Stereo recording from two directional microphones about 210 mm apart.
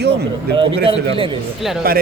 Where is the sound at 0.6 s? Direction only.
25° right (ahead or behind).